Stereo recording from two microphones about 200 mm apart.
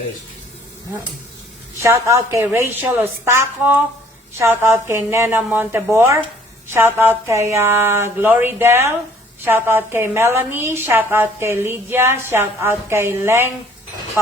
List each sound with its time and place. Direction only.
1.8 s a woman's voice: 15° right (ahead or behind)